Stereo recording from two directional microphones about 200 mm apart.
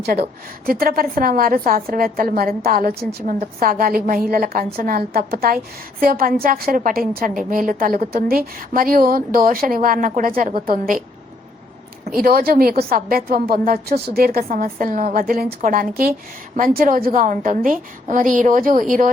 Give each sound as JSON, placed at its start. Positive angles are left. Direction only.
{"t": 0.6, "sound": "a woman's voice", "side_deg": -45}
{"t": 12.1, "sound": "a woman's voice", "side_deg": -45}